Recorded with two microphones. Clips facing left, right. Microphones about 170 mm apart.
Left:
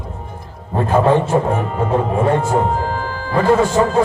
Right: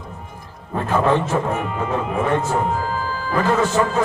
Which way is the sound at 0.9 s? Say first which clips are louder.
Left 4 dB; 30° left (ahead or behind).